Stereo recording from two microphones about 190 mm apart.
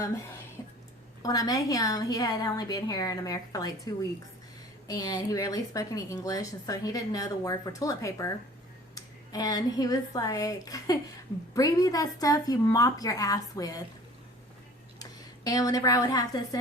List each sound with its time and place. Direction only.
0.0 s a woman's voice: 15° left (ahead or behind)
4.9 s a woman's voice: 20° left (ahead or behind)
14.9 s a woman's voice: 20° left (ahead or behind)